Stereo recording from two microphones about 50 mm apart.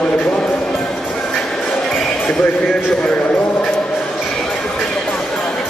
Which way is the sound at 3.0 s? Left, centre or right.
Left.